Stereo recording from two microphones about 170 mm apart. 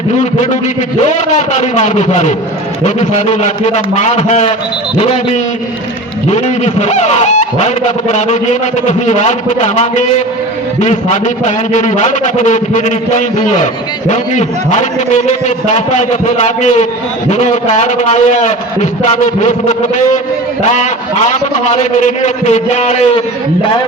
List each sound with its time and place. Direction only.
1.0 s a man's voice: 45° left (ahead or behind)